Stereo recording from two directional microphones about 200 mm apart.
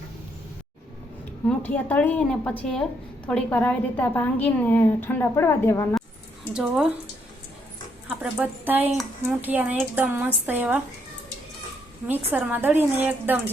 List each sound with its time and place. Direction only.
1.5 s a woman's voice: 5° left (ahead or behind)
6.5 s speech: 5° right (ahead or behind)
8.0 s speech: 5° right (ahead or behind)
12.0 s speech: 10° right (ahead or behind)